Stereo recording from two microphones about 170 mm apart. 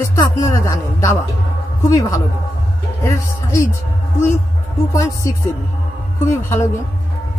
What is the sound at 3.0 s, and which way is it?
Speech, 20° left (ahead or behind).